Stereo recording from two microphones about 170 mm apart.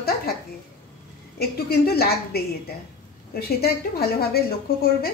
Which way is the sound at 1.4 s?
65° left (ahead or behind).